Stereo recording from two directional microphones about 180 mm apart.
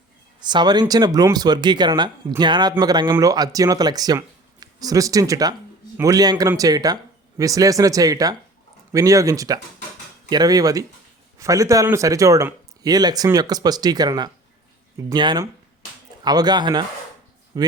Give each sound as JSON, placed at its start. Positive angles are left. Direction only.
{"t": 0.3, "sound": "speech", "side_deg": -25}